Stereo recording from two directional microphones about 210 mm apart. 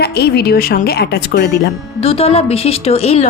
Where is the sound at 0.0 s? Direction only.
50° left (ahead or behind).